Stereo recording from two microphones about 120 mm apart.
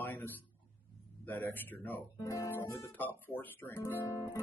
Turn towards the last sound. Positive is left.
turn(degrees=20)  # may be behind; listen again after turning